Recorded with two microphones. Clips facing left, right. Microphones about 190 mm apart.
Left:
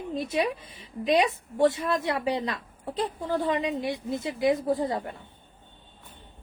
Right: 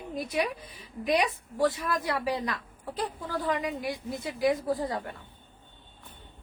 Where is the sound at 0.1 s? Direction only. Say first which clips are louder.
Left 3 dB; 25° left (ahead or behind).